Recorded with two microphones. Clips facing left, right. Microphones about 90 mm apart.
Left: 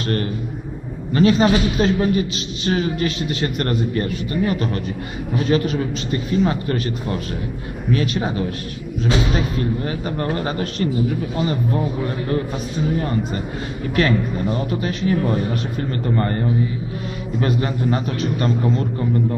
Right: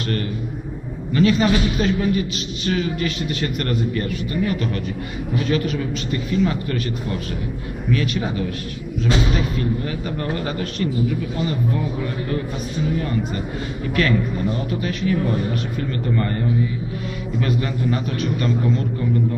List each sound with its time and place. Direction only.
1.1 s speech: 30° left (ahead or behind)
7.9 s speech: 35° left (ahead or behind)
9.3 s speech: 35° left (ahead or behind)
13.9 s speech: 30° left (ahead or behind)
17.4 s speech: 35° left (ahead or behind)